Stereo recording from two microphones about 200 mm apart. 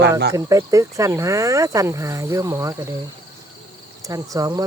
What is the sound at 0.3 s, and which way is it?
Speech, 15° right (ahead or behind).